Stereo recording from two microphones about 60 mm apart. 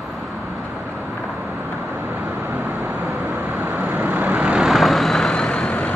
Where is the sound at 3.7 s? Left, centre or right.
Right.